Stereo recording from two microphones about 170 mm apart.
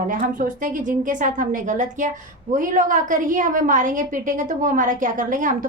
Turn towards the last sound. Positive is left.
turn(degrees=-50)  # may be behind; listen again after turning